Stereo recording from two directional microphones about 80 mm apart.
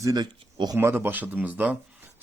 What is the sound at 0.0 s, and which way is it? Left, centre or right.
Speech, right.